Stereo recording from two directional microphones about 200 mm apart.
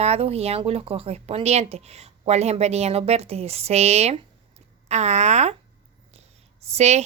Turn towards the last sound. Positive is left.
turn(degrees=-30)  # may be behind; listen again after turning